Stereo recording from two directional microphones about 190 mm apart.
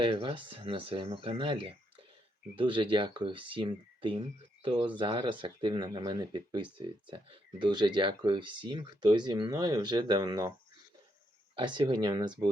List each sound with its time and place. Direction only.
0.0 s speech: 25° right (ahead or behind)
11.5 s speech: 25° right (ahead or behind)